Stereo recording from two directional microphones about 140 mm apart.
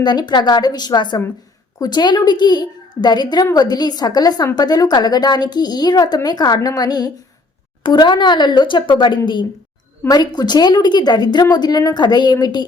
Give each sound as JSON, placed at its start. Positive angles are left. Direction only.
{"t": 0.0, "sound": "a woman's voice", "side_deg": 30}